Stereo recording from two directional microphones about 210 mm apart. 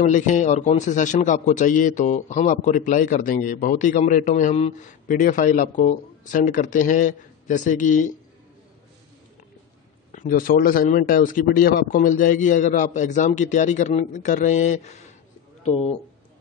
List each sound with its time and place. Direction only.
0.0 s a man's voice: 35° left (ahead or behind)
10.1 s a man's voice: 40° left (ahead or behind)